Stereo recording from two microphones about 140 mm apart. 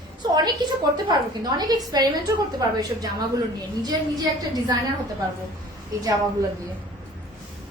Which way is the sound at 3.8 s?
30° right (ahead or behind).